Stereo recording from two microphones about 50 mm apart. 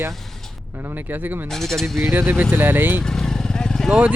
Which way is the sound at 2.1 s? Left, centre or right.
Right.